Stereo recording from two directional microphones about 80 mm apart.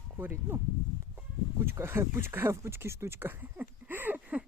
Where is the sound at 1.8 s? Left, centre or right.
Right.